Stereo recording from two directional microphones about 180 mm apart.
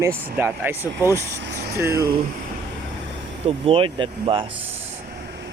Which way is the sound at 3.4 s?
30° right (ahead or behind).